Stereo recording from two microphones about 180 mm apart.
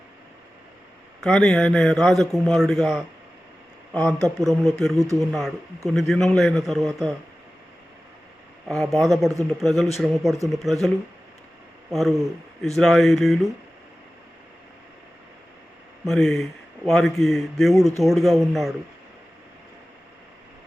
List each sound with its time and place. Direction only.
1.2 s speech: 5° left (ahead or behind)
8.6 s speech: centre (ahead or behind)
16.0 s speech: centre (ahead or behind)